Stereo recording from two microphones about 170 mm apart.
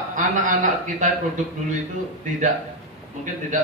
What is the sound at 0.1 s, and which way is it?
Speech, 50° right (ahead or behind).